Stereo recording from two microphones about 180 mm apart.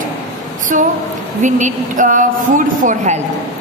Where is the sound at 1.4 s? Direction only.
45° right (ahead or behind).